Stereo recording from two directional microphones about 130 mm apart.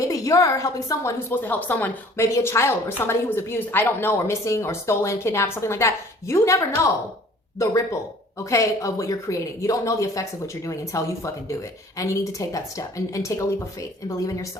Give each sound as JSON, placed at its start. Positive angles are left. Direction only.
{"t": 0.1, "sound": "a woman's voice", "side_deg": 25}